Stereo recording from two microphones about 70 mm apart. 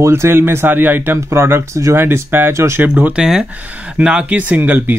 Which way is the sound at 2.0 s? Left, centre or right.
Right.